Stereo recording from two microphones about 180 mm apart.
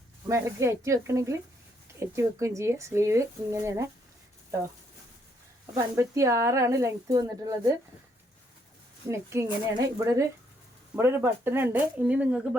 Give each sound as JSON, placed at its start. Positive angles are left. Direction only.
{"t": 0.3, "sound": "speech", "side_deg": -15}
{"t": 5.7, "sound": "speech", "side_deg": -15}
{"t": 9.0, "sound": "speech", "side_deg": -15}